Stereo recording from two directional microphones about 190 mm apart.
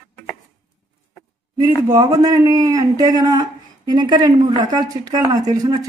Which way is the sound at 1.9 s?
20° right (ahead or behind).